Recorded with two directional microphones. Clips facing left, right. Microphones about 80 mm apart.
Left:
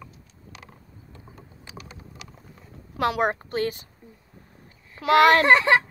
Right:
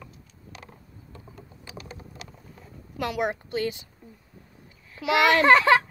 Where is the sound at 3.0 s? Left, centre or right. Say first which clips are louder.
Left 4 dB; left.